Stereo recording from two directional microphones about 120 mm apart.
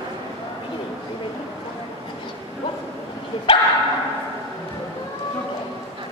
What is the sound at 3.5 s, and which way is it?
Dog, 50° left (ahead or behind).